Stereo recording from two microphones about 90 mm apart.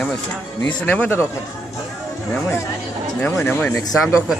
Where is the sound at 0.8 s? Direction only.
20° left (ahead or behind).